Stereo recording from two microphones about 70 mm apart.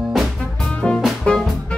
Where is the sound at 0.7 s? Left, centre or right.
Centre.